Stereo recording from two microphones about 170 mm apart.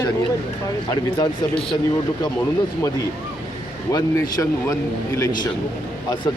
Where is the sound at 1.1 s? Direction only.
25° left (ahead or behind).